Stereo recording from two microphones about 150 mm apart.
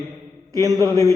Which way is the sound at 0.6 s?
25° right (ahead or behind).